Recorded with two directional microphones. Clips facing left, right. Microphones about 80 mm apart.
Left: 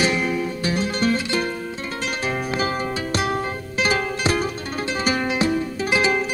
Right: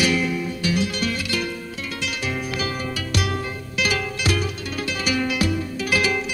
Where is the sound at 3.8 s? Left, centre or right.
Left.